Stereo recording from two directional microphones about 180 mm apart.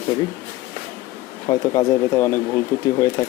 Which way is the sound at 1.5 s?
25° left (ahead or behind).